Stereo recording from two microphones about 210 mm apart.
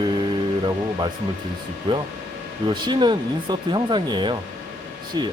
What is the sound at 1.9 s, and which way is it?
Speech, 20° right (ahead or behind).